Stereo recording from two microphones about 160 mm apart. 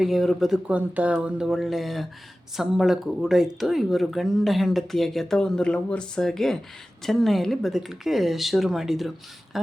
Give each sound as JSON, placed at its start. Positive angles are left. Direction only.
{"t": 0.0, "sound": "speech", "side_deg": 0}